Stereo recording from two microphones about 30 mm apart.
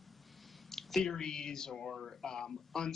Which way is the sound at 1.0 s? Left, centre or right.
Left.